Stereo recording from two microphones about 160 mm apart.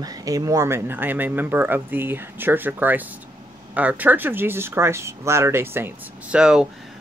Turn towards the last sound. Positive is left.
turn(degrees=-5)  # may be behind; listen again after turning